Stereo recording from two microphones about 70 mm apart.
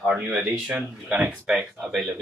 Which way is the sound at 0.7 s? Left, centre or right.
Centre.